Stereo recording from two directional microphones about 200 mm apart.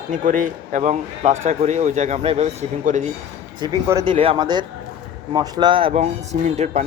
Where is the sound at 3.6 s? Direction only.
15° right (ahead or behind).